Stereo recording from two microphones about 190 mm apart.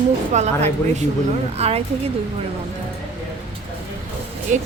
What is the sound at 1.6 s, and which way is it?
Speech, 35° right (ahead or behind).